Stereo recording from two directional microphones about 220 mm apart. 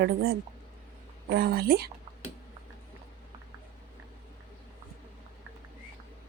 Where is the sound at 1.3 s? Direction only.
45° right (ahead or behind).